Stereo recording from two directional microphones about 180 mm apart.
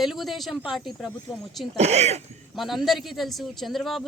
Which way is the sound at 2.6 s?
Centre (ahead or behind).